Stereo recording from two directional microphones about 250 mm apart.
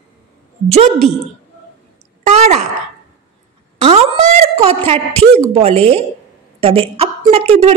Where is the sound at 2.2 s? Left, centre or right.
Right.